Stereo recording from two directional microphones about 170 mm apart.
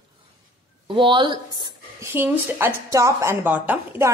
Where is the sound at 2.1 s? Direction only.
10° right (ahead or behind).